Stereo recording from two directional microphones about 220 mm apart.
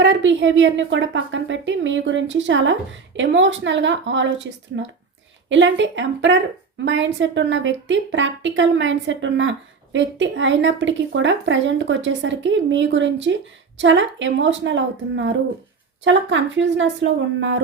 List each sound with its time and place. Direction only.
0.0 s a woman's voice: 55° right (ahead or behind)